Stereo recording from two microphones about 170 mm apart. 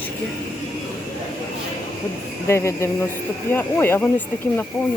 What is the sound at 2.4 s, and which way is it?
Speech, 15° left (ahead or behind).